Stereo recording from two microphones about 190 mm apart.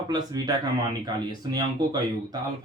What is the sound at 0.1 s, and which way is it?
Speech, 20° right (ahead or behind).